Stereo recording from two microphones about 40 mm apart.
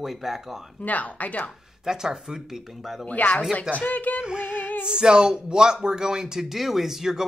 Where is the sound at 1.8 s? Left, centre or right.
Centre.